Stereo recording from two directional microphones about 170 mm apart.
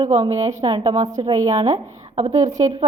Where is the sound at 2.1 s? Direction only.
40° right (ahead or behind).